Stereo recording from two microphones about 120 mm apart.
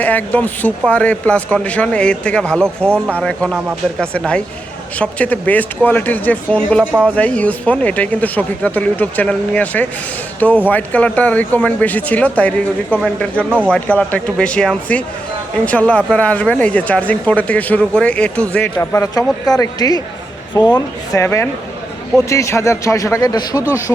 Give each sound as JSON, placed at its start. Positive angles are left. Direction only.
{"t": 0.0, "sound": "speech", "side_deg": 15}
{"t": 4.9, "sound": "speech", "side_deg": 10}
{"t": 19.5, "sound": "speech", "side_deg": 30}
{"t": 21.2, "sound": "a man's voice", "side_deg": 15}